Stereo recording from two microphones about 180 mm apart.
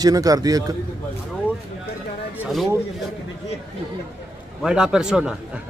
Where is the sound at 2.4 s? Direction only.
Centre (ahead or behind).